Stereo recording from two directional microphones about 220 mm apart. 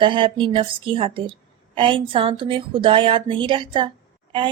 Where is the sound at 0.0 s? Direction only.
20° right (ahead or behind).